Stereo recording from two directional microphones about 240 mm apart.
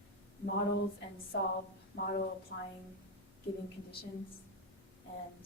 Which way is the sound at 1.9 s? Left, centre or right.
Left.